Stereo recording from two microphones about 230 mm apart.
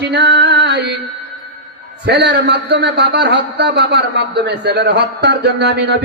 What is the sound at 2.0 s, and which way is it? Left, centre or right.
A man's voice, right.